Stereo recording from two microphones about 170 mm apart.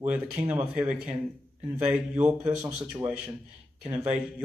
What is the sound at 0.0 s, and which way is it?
A man's voice, 10° right (ahead or behind).